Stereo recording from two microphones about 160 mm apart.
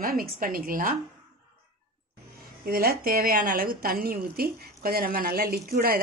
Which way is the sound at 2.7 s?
70° right (ahead or behind).